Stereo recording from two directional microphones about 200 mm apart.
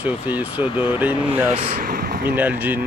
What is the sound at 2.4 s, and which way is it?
Speech, 10° right (ahead or behind).